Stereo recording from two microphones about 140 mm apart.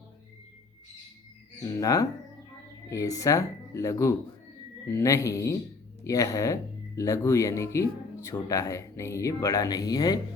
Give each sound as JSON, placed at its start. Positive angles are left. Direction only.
{"t": 1.5, "sound": "speech", "side_deg": 25}